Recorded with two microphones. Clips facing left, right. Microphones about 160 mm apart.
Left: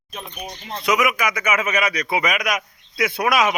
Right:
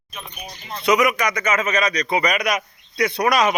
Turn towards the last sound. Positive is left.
turn(degrees=5)  # may be behind; listen again after turning